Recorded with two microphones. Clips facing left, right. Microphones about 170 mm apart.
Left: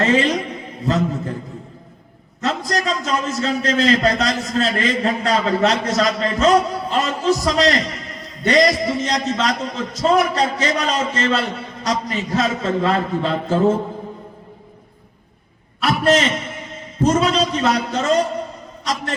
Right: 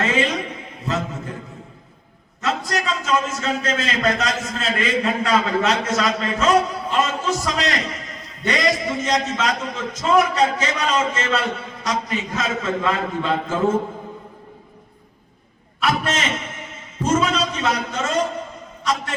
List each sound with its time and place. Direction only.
0.0 s a man's voice: 35° left (ahead or behind)
2.4 s a man's voice: 35° left (ahead or behind)
15.8 s a man's voice: 35° left (ahead or behind)